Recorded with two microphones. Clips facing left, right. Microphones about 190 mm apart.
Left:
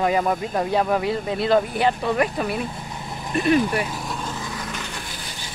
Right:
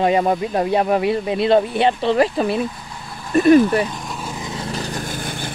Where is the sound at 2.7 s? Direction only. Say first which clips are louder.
Left 2 dB; 20° left (ahead or behind).